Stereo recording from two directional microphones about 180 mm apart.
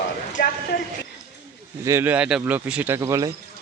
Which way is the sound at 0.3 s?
60° left (ahead or behind).